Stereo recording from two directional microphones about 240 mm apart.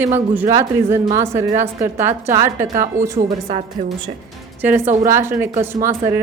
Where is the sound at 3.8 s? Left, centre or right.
Right.